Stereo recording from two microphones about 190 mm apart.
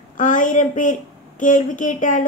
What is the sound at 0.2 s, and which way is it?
A woman's voice, 40° left (ahead or behind).